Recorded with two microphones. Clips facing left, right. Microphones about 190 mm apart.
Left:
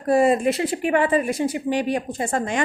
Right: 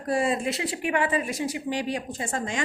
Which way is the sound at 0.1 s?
55° left (ahead or behind).